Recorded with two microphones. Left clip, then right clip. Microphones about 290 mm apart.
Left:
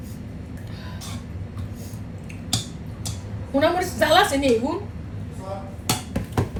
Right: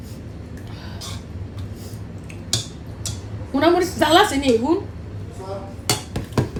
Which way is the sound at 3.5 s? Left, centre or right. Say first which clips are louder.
Right 3 dB; centre.